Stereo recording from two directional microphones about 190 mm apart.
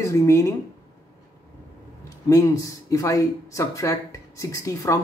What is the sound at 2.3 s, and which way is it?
Speech, 15° left (ahead or behind).